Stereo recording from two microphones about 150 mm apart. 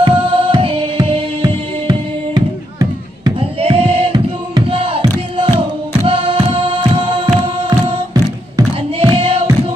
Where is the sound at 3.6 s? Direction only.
40° right (ahead or behind).